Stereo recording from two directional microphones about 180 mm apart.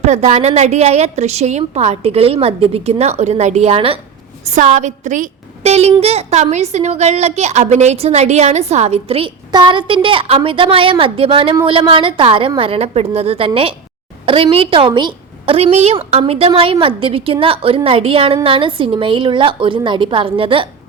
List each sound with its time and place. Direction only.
0.0 s a woman's voice: 40° right (ahead or behind)